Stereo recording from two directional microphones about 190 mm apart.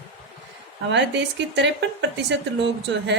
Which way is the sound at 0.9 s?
70° right (ahead or behind).